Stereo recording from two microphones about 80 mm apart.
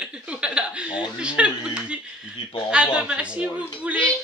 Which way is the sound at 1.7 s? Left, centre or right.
Centre.